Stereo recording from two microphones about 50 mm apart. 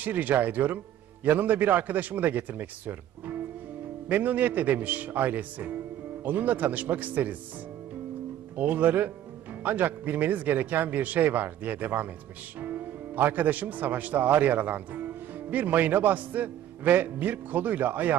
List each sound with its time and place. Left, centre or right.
0.0 s speech: right
8.5 s speech: right